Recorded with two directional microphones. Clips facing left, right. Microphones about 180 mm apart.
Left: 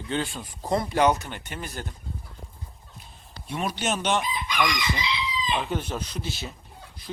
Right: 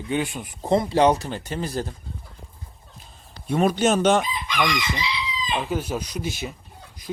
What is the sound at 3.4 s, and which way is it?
Chicken, 50° right (ahead or behind).